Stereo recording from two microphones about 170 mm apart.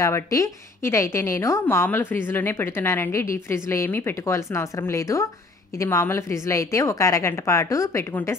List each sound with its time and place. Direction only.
0.0 s a woman's voice: 20° left (ahead or behind)